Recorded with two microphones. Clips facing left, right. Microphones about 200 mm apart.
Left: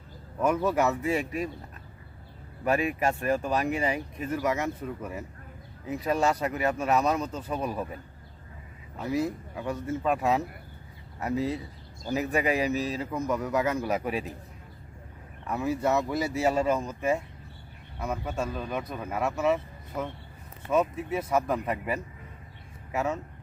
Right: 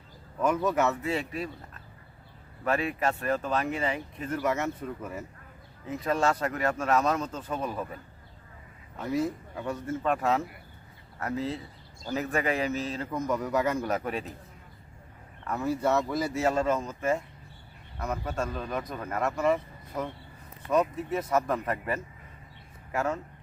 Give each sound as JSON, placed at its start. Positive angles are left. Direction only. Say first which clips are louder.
{"t": 0.3, "sound": "speech", "louder": "left 1 dB", "side_deg": 10}
{"t": 2.6, "sound": "speech", "louder": "left 2 dB", "side_deg": 15}
{"t": 9.0, "sound": "speech", "louder": "even", "side_deg": 5}
{"t": 15.4, "sound": "speech", "louder": "even", "side_deg": 10}